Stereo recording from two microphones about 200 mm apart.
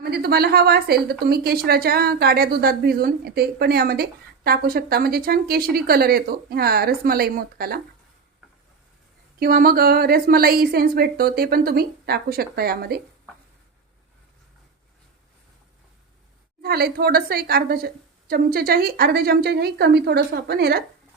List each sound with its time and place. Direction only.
0.0 s a woman's voice: 50° right (ahead or behind)
9.4 s a woman's voice: 50° right (ahead or behind)
16.6 s a woman's voice: 50° right (ahead or behind)